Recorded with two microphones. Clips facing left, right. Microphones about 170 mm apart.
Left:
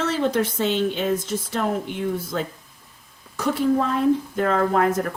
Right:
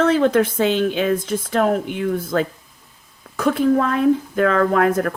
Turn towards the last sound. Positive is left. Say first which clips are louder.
# right 3 dB
turn(degrees=-60)  # may be behind; listen again after turning